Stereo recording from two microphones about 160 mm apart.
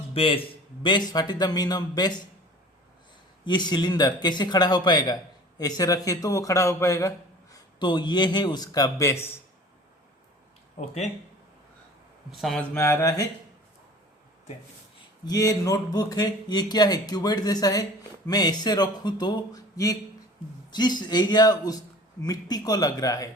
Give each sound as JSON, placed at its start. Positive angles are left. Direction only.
{"t": 0.1, "sound": "speech", "side_deg": 35}
{"t": 3.4, "sound": "speech", "side_deg": 30}
{"t": 10.8, "sound": "speech", "side_deg": 45}
{"t": 12.3, "sound": "speech", "side_deg": 0}
{"t": 12.7, "sound": "mantra", "side_deg": 15}
{"t": 15.2, "sound": "speech", "side_deg": 25}